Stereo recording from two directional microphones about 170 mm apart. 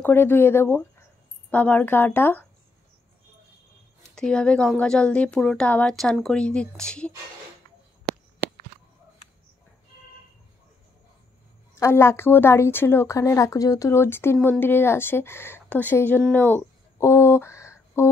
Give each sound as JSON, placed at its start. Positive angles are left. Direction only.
{"t": 0.0, "sound": "speech", "side_deg": 10}
{"t": 4.1, "sound": "a woman's voice", "side_deg": 5}
{"t": 11.8, "sound": "speech", "side_deg": 15}